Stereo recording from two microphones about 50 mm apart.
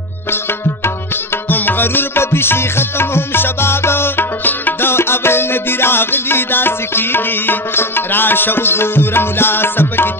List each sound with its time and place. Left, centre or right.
1.5 s music: left